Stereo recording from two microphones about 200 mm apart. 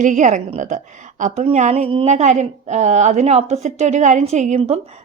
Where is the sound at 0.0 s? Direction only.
40° right (ahead or behind).